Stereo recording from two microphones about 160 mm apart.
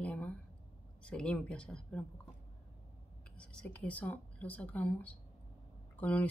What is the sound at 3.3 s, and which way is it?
Speech, 5° left (ahead or behind).